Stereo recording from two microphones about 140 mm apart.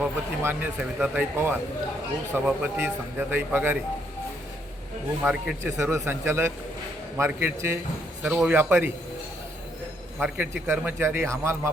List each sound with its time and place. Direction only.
0.0 s a man's voice: 15° right (ahead or behind)
5.2 s a man's voice: 10° right (ahead or behind)
8.2 s a man's voice: 5° right (ahead or behind)
10.2 s a man's voice: 10° right (ahead or behind)